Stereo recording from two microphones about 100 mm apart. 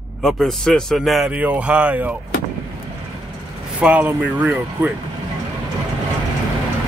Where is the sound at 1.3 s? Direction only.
15° right (ahead or behind).